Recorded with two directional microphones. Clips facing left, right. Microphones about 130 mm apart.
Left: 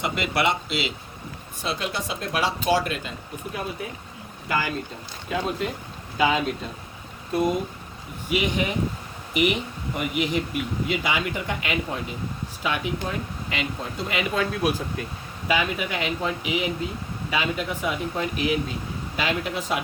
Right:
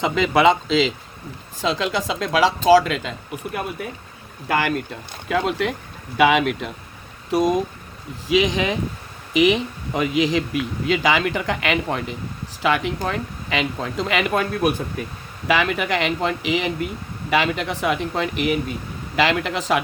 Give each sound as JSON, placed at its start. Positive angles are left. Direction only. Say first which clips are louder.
{"t": 1.6, "sound": "speech", "louder": "right 7 dB", "side_deg": -90}
{"t": 5.3, "sound": "speech", "louder": "right 5 dB", "side_deg": -85}
{"t": 6.1, "sound": "speech", "louder": "right 6 dB", "side_deg": -80}
{"t": 7.3, "sound": "speech", "louder": "right 4 dB", "side_deg": -90}
{"t": 14.3, "sound": "speech", "louder": "right 2 dB", "side_deg": -55}
{"t": 15.4, "sound": "speech", "louder": "right 5 dB", "side_deg": -85}